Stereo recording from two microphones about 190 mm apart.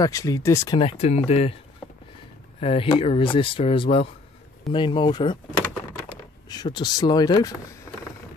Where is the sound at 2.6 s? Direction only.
30° left (ahead or behind).